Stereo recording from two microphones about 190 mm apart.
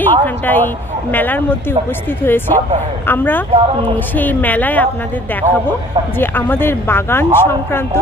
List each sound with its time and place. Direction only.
0.0 s speech: 10° left (ahead or behind)
3.5 s speech: 30° right (ahead or behind)
3.9 s speech: 10° left (ahead or behind)